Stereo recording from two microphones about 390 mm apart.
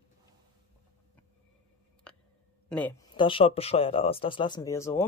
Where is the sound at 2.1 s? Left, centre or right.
Centre.